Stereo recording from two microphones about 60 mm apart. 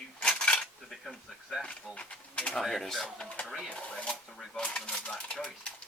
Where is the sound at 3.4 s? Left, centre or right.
Centre.